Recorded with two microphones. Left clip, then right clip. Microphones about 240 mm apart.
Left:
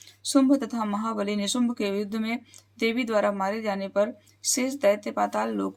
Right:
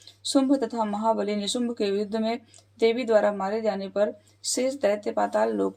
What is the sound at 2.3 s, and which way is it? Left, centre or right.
Speech, left.